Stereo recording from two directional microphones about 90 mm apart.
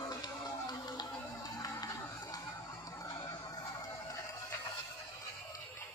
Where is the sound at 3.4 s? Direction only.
45° left (ahead or behind).